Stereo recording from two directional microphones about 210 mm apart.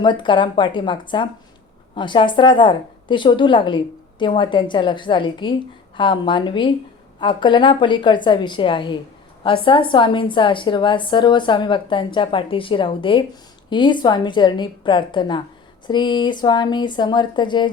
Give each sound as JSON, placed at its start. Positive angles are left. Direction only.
{"t": 0.0, "sound": "a woman's voice", "side_deg": 20}